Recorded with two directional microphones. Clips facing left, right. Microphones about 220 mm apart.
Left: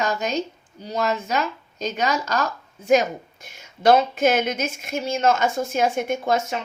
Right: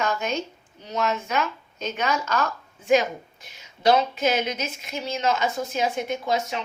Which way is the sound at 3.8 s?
50° left (ahead or behind).